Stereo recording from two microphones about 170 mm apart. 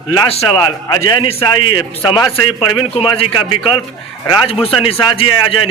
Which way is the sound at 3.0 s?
35° left (ahead or behind).